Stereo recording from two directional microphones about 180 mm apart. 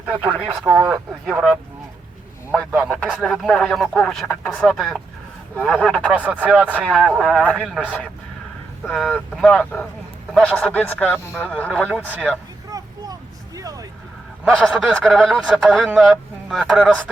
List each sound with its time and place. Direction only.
0.3 s speech: 10° right (ahead or behind); by 11.8 s 10° left (ahead or behind)
11.8 s speech: 5° right (ahead or behind)
12.7 s vehicle: 20° right (ahead or behind)
13.6 s a sound: 20° right (ahead or behind)
14.4 s speech: 5° right (ahead or behind)